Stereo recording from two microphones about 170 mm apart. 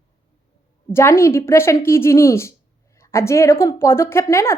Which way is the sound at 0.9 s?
15° left (ahead or behind).